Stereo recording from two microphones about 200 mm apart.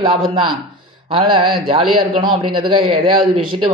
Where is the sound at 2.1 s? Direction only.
25° right (ahead or behind).